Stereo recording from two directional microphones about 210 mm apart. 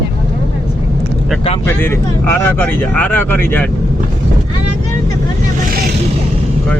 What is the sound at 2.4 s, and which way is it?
Speech, 10° left (ahead or behind).